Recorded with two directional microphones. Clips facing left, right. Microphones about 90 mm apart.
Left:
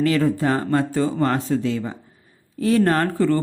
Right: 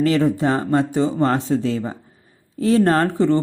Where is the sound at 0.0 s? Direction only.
25° right (ahead or behind).